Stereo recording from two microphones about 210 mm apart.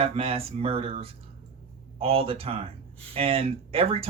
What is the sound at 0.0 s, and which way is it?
Speech, 25° right (ahead or behind).